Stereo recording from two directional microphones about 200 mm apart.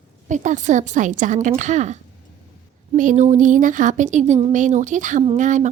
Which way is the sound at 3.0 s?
40° right (ahead or behind).